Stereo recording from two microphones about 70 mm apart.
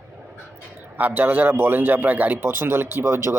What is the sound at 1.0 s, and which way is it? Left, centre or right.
Speech, right.